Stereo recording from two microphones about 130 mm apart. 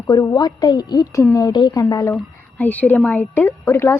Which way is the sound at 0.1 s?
30° left (ahead or behind).